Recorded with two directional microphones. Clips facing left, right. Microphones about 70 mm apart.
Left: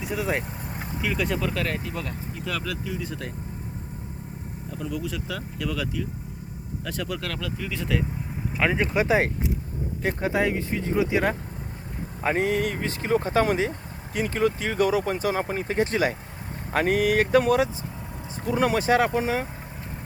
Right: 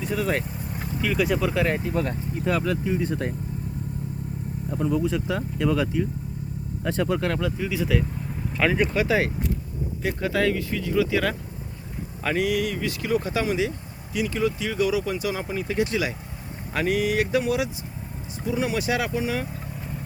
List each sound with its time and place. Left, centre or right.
0.0 s speech: centre
0.7 s vehicle: centre
1.0 s speech: centre
1.5 s speech: right
1.9 s speech: right
4.7 s speech: right
7.6 s speech: centre
8.5 s speech: centre
9.0 s speech: left